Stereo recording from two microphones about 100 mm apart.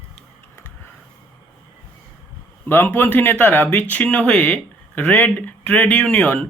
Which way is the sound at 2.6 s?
20° left (ahead or behind).